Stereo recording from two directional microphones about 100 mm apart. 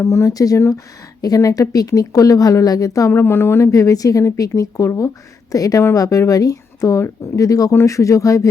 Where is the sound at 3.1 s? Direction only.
20° left (ahead or behind).